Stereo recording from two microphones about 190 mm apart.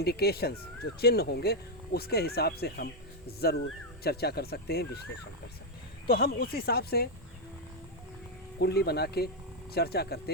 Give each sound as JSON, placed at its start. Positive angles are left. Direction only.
{"t": 0.0, "sound": "speech", "side_deg": 55}
{"t": 6.1, "sound": "speech", "side_deg": 50}
{"t": 8.5, "sound": "speech", "side_deg": 60}